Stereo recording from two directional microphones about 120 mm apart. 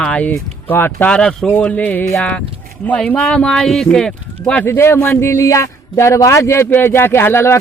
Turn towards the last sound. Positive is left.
turn(degrees=20)  # may be behind; listen again after turning